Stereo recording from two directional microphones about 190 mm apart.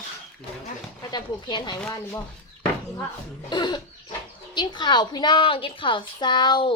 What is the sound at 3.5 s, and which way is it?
A woman's voice, 20° left (ahead or behind).